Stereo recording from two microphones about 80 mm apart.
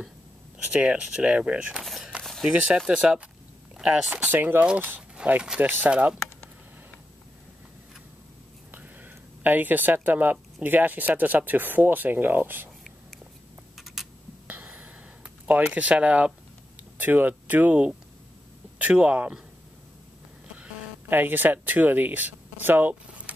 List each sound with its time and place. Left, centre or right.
0.7 s speech: centre
1.8 s a sound: centre
2.9 s speech: centre
4.3 s speech: right
8.7 s a sound: right
10.6 s speech: right
13.7 s a sound: centre
14.5 s gasp: centre
15.4 s speech: centre
21.1 s speech: right